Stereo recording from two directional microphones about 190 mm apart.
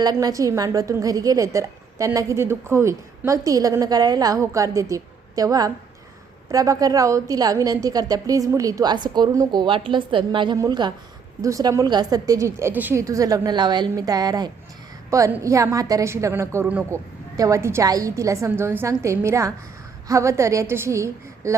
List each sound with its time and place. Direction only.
0.0 s a woman's voice: 20° right (ahead or behind)